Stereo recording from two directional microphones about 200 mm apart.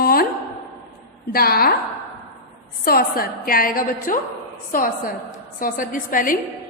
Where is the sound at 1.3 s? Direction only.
50° left (ahead or behind).